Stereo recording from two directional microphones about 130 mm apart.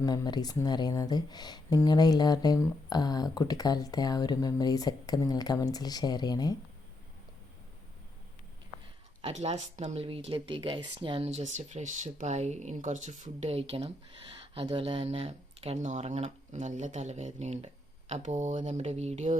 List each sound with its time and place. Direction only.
0.0 s speech: 30° left (ahead or behind)
9.3 s speech: 55° right (ahead or behind); by 11.3 s 40° right (ahead or behind)
11.3 s speech: 60° right (ahead or behind)